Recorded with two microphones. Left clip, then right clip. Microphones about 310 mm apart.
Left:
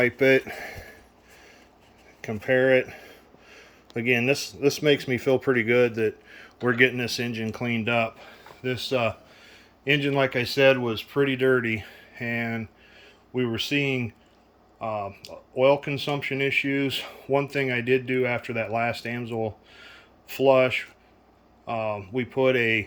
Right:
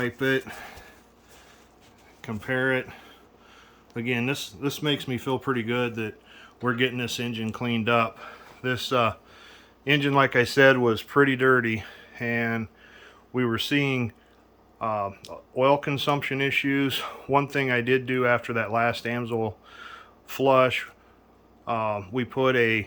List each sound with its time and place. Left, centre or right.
0.3 s speech: right
2.4 s a man's voice: centre